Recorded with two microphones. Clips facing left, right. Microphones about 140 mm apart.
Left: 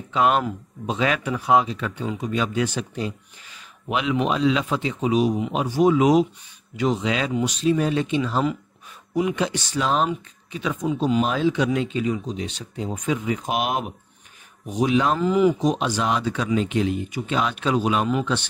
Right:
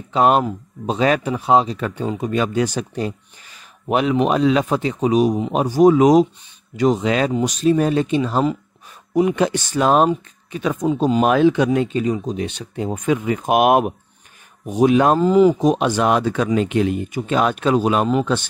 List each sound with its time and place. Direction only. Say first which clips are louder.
0.1 s speech: right 4 dB; 40° right (ahead or behind)
0.4 s a man's voice: right 4 dB; 30° right (ahead or behind)
1.3 s speech: right 3 dB; 25° right (ahead or behind)
1.8 s speech: right 5 dB; 45° right (ahead or behind)
11.2 s speech: right 7 dB; 60° right (ahead or behind); by 12.4 s 40° right (ahead or behind)
12.4 s speech: right 5 dB; 60° right (ahead or behind)
15.1 s speech: right 6 dB; 35° right (ahead or behind)
15.6 s speech: right 6 dB; 55° right (ahead or behind)